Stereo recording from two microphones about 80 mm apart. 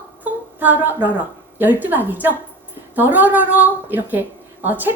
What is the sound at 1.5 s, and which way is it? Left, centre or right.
A woman's voice, right.